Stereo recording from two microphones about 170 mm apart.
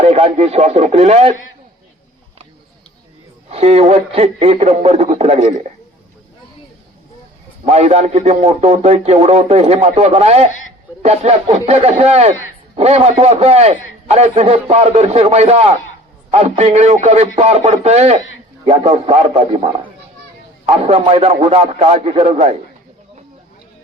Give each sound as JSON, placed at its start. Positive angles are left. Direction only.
{"t": 0.0, "sound": "a man's voice", "side_deg": -40}
{"t": 3.5, "sound": "a man's voice", "side_deg": -40}
{"t": 7.6, "sound": "a man's voice", "side_deg": -40}